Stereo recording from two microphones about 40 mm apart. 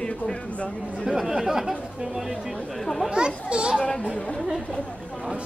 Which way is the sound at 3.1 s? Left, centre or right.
Right.